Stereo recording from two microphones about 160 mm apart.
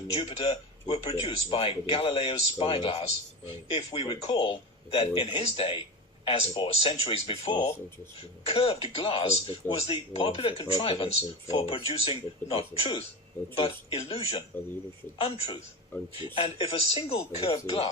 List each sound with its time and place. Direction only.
0.1 s speech: 35° left (ahead or behind)